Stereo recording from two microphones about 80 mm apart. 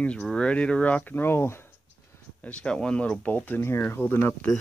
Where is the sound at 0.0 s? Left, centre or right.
Centre; by 1.6 s left.